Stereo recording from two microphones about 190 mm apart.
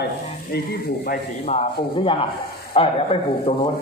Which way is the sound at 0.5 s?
55° left (ahead or behind).